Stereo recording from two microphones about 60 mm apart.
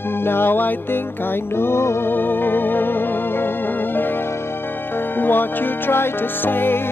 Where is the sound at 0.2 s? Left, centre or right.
Left.